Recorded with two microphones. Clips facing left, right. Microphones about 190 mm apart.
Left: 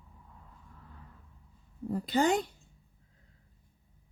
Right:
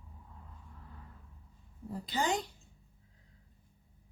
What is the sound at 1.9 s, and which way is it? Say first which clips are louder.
Speech: left 6 dB; 60° left (ahead or behind).